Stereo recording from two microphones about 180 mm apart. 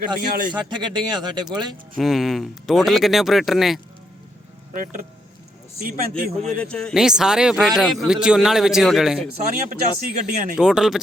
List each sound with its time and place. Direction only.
0.2 s a man's voice: 55° right (ahead or behind)
0.5 s speech: 25° right (ahead or behind)
2.0 s speech: centre (ahead or behind)
4.7 s a man's voice: 50° right (ahead or behind)
6.3 s speech: 5° left (ahead or behind)
9.3 s a man's voice: 50° right (ahead or behind)
10.6 s speech: 5° right (ahead or behind)